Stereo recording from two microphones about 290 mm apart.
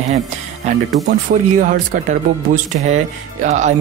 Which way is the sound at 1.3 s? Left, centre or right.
Right.